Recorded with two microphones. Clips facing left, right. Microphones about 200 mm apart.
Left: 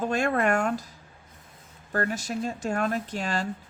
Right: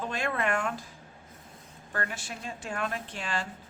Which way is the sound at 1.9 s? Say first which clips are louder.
Left 8 dB; 40° left (ahead or behind).